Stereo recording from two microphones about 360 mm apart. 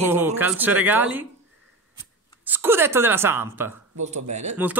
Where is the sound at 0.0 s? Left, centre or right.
Centre.